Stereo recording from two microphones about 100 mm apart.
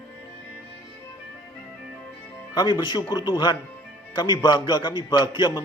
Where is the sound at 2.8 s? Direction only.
45° left (ahead or behind).